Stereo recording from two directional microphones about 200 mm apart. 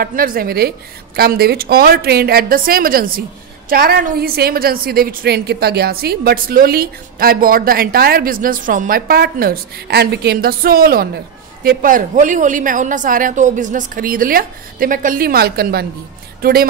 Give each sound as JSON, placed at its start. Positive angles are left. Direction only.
{"t": 0.0, "sound": "a woman's voice", "side_deg": -45}